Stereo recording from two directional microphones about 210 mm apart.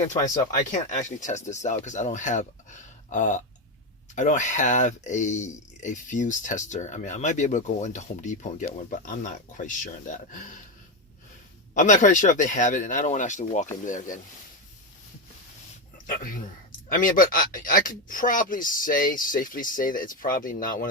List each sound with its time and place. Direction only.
0.1 s speech: 35° left (ahead or behind)
11.7 s speech: 35° left (ahead or behind)
16.0 s speech: 40° left (ahead or behind)